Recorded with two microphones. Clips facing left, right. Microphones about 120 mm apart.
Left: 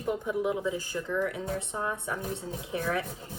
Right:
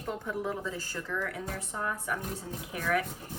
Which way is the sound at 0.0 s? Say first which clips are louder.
Left 5 dB; 15° left (ahead or behind).